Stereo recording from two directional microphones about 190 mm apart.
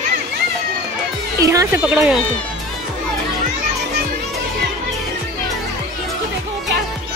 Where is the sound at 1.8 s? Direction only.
5° right (ahead or behind).